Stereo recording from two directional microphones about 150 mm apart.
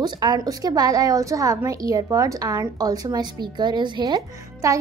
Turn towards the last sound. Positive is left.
turn(degrees=-25)  # may be behind; listen again after turning